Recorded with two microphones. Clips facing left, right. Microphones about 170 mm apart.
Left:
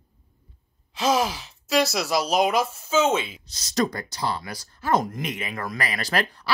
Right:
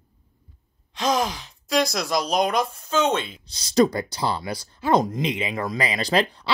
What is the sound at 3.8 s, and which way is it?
Speech, 30° right (ahead or behind).